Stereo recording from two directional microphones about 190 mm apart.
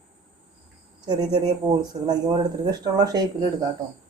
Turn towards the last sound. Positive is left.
turn(degrees=-20)  # may be behind; listen again after turning